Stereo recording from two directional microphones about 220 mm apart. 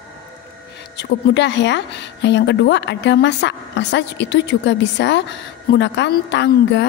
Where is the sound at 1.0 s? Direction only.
55° left (ahead or behind).